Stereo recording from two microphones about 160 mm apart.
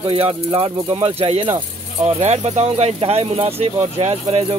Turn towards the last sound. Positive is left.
turn(degrees=-40)  # may be behind; listen again after turning